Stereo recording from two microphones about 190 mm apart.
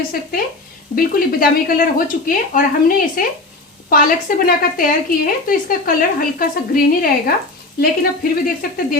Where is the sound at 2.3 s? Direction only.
45° left (ahead or behind).